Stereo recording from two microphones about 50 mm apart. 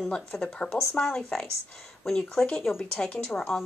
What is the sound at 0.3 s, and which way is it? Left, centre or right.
Speech, centre.